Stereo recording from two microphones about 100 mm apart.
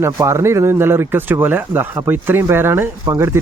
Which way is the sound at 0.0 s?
30° right (ahead or behind).